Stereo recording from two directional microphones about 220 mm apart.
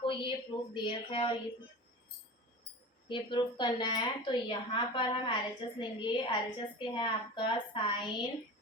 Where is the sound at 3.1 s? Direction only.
20° left (ahead or behind).